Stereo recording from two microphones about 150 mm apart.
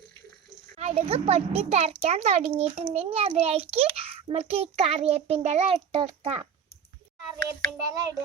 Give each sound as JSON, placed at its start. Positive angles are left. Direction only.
{"t": 0.8, "sound": "a child's voice", "side_deg": -45}
{"t": 7.9, "sound": "speech", "side_deg": -25}